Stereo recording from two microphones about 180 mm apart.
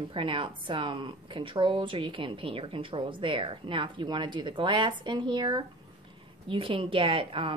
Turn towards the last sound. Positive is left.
turn(degrees=-30)  # may be behind; listen again after turning